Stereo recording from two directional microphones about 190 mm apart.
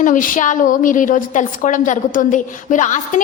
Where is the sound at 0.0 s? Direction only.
45° left (ahead or behind).